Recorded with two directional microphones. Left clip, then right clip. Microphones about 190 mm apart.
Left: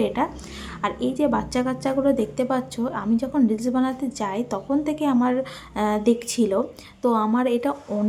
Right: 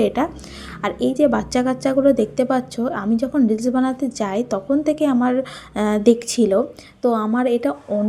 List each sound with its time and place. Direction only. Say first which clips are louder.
0.0 s a woman's voice: right 4 dB; 20° right (ahead or behind)